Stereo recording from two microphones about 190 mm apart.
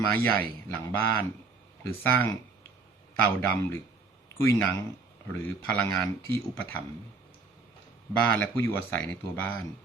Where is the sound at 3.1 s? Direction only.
10° left (ahead or behind).